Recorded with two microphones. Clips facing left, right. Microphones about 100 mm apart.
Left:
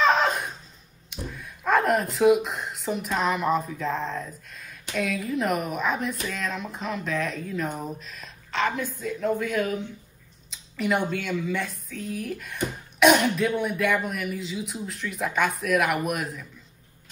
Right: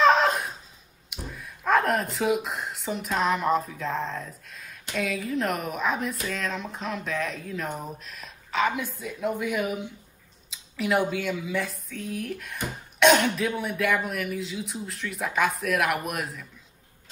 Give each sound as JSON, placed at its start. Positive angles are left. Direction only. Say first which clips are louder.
{"t": 0.0, "sound": "a sound", "louder": "right 2 dB", "side_deg": 0}
{"t": 1.1, "sound": "speech", "louder": "left 2 dB", "side_deg": 0}
{"t": 10.5, "sound": "speech", "louder": "even", "side_deg": 0}